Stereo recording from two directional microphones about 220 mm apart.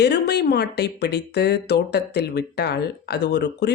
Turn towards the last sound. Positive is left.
turn(degrees=50)  # may be behind; listen again after turning